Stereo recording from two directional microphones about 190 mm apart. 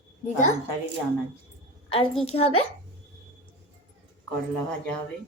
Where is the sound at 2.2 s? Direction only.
30° left (ahead or behind).